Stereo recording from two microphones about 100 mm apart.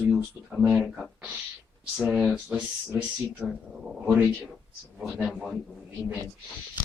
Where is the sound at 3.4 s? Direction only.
5° right (ahead or behind).